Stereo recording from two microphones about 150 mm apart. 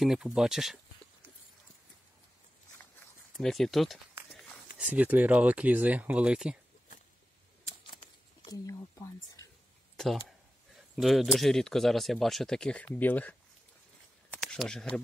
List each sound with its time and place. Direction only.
0.0 s speech: 5° right (ahead or behind)
3.3 s speech: centre (ahead or behind)
4.3 s a sound: centre (ahead or behind)
4.7 s speech: 10° right (ahead or behind)
7.8 s a sound: 35° left (ahead or behind)
8.6 s speech: 20° left (ahead or behind)
9.9 s speech: centre (ahead or behind)
14.4 s speech: centre (ahead or behind)